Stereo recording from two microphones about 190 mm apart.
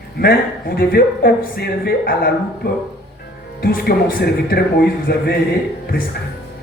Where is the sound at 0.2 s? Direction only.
50° left (ahead or behind).